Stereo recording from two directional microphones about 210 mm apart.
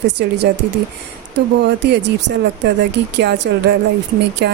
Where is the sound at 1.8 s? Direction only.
55° right (ahead or behind).